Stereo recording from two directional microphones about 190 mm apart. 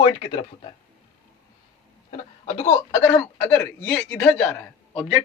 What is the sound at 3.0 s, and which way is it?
A man's voice, 10° left (ahead or behind).